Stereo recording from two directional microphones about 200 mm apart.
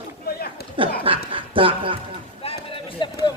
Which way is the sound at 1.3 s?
25° right (ahead or behind).